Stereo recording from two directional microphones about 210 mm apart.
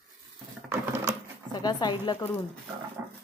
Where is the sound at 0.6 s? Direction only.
10° right (ahead or behind).